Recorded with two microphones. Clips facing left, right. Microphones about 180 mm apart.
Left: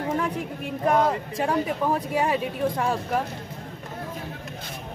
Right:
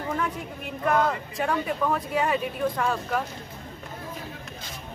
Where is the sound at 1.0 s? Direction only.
35° left (ahead or behind).